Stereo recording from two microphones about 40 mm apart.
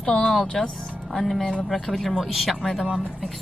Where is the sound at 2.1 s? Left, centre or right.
Centre.